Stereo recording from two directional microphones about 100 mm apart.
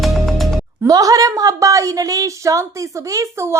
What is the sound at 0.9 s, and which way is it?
A woman's voice, 35° right (ahead or behind).